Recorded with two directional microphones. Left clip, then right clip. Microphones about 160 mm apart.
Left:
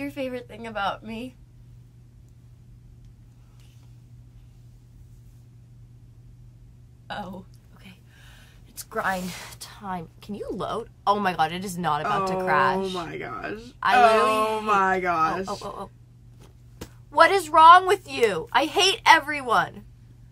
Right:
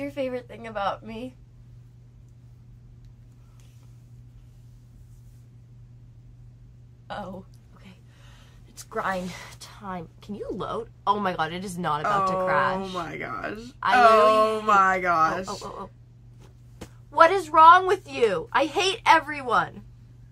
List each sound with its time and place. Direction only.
0.0 s a woman's voice: 25° left (ahead or behind)
7.1 s speech: 25° left (ahead or behind)
12.0 s speech: 20° right (ahead or behind)
12.4 s a woman's voice: 30° left (ahead or behind)
13.1 s speech: 15° right (ahead or behind)
15.6 s a woman's voice: 30° left (ahead or behind)
17.1 s a woman's voice: 35° left (ahead or behind)